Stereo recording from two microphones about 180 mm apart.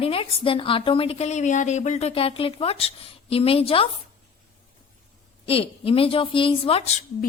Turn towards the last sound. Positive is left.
turn(degrees=35)  # may be behind; listen again after turning